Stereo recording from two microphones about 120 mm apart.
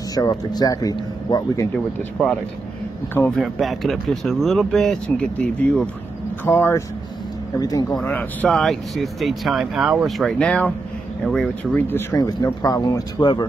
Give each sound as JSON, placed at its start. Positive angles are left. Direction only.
{"t": 0.1, "sound": "speech", "side_deg": 30}
{"t": 2.2, "sound": "speech", "side_deg": 5}
{"t": 6.4, "sound": "speech", "side_deg": 20}
{"t": 7.5, "sound": "speech", "side_deg": 30}
{"t": 7.9, "sound": "speech", "side_deg": 10}
{"t": 11.9, "sound": "speech", "side_deg": 30}
{"t": 13.2, "sound": "speech", "side_deg": 40}